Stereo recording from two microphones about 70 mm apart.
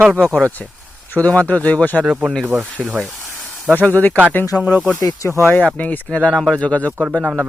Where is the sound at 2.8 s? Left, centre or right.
Centre.